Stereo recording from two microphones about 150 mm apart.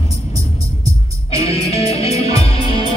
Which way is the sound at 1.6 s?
45° left (ahead or behind).